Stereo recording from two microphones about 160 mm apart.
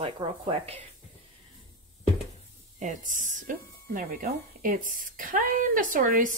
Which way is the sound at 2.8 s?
50° right (ahead or behind).